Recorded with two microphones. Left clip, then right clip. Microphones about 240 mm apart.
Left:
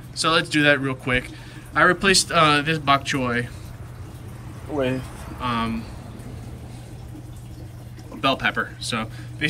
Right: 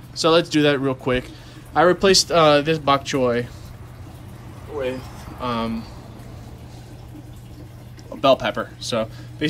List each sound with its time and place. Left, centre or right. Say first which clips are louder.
0.3 s speech: right 1 dB; centre
5.4 s speech: even; centre
8.2 s speech: right 4 dB; centre